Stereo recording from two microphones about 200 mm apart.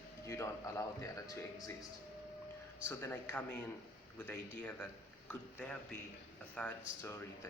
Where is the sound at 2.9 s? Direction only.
10° left (ahead or behind).